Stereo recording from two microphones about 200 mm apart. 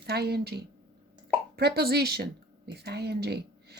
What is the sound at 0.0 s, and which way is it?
A woman's voice, 50° right (ahead or behind).